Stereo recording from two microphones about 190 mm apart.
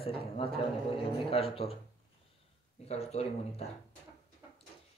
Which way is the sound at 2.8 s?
35° left (ahead or behind).